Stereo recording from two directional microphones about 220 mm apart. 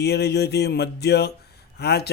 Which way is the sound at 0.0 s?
50° left (ahead or behind).